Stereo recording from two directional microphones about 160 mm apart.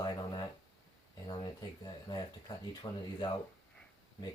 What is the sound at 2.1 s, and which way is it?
Speech, 25° left (ahead or behind).